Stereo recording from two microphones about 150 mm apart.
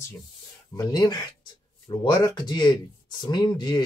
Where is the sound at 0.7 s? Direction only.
25° left (ahead or behind).